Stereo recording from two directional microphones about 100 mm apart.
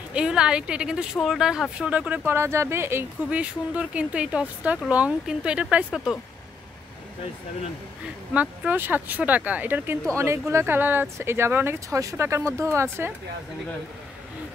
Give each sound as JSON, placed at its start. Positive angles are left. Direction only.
{"t": 0.1, "sound": "speech", "side_deg": -10}
{"t": 3.3, "sound": "speech", "side_deg": -15}
{"t": 8.3, "sound": "speech", "side_deg": -15}